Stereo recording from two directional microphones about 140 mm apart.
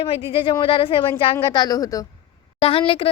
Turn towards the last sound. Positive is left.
turn(degrees=40)  # may be behind; listen again after turning